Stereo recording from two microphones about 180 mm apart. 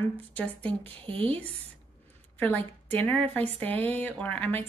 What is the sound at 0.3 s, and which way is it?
Speech, 5° left (ahead or behind).